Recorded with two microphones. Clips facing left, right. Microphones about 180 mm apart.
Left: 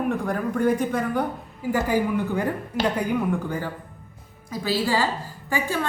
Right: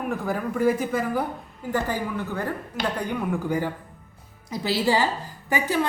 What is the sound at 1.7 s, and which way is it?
A woman's voice, 10° left (ahead or behind).